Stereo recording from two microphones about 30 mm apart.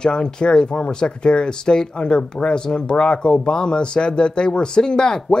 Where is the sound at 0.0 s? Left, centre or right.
Left.